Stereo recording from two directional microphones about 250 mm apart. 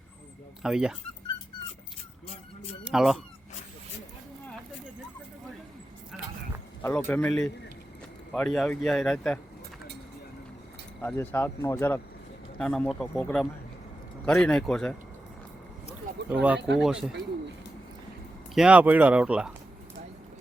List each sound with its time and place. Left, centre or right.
0.6 s speech: centre
2.2 s music: left
2.9 s speech: centre
6.8 s speech: centre
11.0 s speech: centre
16.3 s speech: centre
16.6 s speech: right
16.8 s speech: centre
18.5 s speech: centre